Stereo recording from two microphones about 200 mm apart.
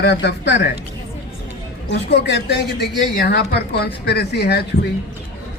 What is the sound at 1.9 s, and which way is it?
A man's voice, 55° left (ahead or behind).